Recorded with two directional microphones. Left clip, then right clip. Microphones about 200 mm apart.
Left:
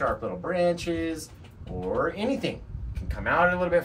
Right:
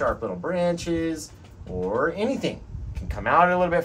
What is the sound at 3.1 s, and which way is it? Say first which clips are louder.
Speech: right 4 dB; 25° right (ahead or behind).